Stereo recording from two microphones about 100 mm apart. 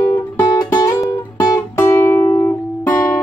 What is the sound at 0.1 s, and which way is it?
Music, 40° left (ahead or behind).